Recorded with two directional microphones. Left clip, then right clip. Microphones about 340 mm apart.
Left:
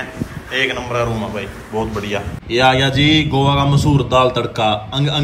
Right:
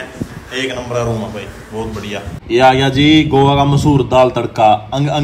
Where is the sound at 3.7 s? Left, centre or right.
Left.